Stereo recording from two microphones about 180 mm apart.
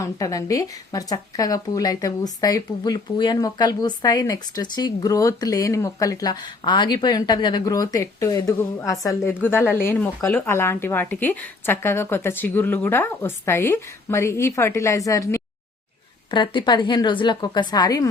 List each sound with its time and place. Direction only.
0.0 s a woman's voice: 20° left (ahead or behind)